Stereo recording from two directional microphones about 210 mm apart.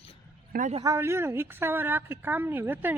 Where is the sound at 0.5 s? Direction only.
35° right (ahead or behind).